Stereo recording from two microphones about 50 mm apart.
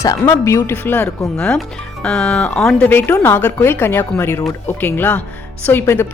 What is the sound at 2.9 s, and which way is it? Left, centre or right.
A woman's voice, left.